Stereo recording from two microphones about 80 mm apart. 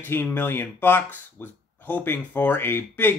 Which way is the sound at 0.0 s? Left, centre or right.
Left.